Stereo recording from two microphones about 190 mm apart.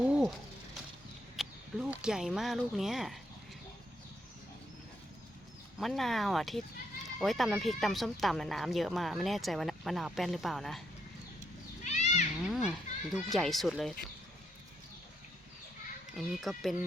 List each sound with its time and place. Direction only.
0.0 s a sound: 5° right (ahead or behind)
1.4 s speech: 5° right (ahead or behind)
5.8 s speech: centre (ahead or behind)
11.8 s cat: 35° left (ahead or behind)
12.5 s speech: centre (ahead or behind)
16.1 s speech: centre (ahead or behind)